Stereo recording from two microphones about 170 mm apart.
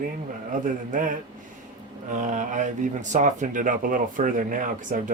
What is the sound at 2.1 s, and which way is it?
Speech, 45° right (ahead or behind).